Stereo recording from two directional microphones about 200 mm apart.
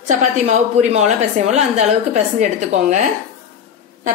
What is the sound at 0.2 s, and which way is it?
A woman's voice, 35° right (ahead or behind).